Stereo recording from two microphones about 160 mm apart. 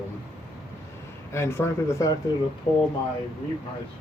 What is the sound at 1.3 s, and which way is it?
Speech, 15° left (ahead or behind).